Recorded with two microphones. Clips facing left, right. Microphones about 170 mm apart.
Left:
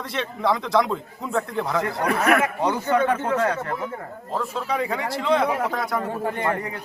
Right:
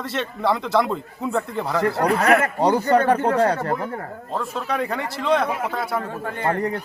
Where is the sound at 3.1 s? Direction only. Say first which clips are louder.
Right 4 dB; 35° right (ahead or behind).